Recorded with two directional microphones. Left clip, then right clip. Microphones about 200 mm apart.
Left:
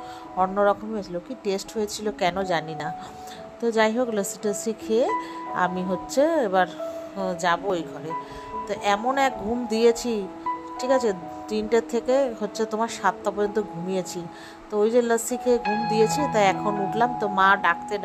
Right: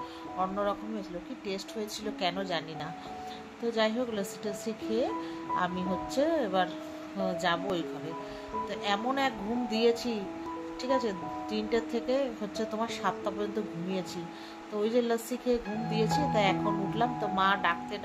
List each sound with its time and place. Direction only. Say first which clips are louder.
0.4 s speech: left 10 dB; 30° left (ahead or behind)